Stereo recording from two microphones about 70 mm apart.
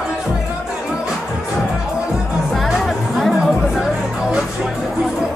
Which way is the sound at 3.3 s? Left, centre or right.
Centre.